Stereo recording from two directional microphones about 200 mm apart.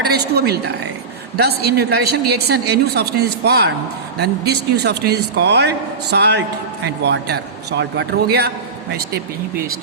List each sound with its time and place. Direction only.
0.0 s a woman's voice: 55° right (ahead or behind)